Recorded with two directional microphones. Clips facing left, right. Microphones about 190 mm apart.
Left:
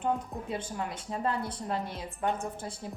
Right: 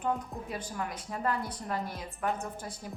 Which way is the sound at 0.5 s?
25° left (ahead or behind).